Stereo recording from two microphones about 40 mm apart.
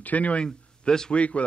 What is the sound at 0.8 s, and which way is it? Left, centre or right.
Speech, centre.